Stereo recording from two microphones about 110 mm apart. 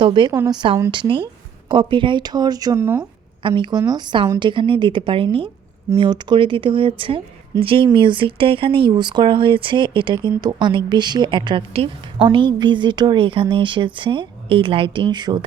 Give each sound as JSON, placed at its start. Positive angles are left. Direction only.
{"t": 0.0, "sound": "speech", "side_deg": -45}
{"t": 2.7, "sound": "speech", "side_deg": -20}
{"t": 3.4, "sound": "speech", "side_deg": -45}